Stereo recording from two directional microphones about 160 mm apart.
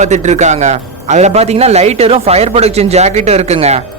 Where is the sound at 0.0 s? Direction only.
45° right (ahead or behind).